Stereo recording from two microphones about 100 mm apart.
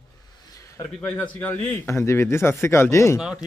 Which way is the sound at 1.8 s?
25° left (ahead or behind).